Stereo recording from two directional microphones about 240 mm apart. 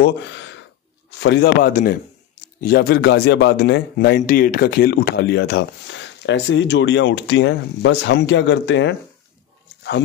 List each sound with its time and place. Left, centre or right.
0.0 s speech: left